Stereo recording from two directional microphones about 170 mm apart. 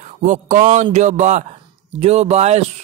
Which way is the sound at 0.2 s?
45° right (ahead or behind).